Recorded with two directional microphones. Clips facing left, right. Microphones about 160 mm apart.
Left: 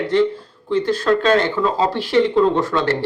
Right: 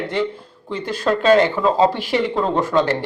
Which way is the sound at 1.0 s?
10° right (ahead or behind).